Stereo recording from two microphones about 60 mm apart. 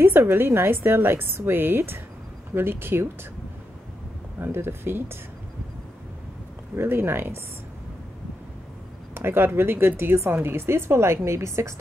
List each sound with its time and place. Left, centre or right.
0.0 s a woman's voice: right
4.4 s a woman's voice: right
6.8 s a woman's voice: right
9.1 s a woman's voice: right